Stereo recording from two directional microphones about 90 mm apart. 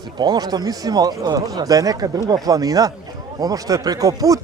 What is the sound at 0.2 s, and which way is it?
Speech, 50° right (ahead or behind).